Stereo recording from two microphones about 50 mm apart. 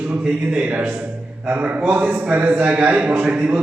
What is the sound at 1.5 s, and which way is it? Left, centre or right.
A man's voice, right.